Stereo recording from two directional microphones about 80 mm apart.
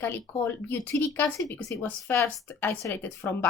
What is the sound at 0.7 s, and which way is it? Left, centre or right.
Speech, left.